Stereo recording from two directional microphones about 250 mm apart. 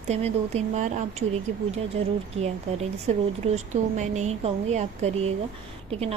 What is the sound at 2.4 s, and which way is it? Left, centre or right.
A woman's voice, right.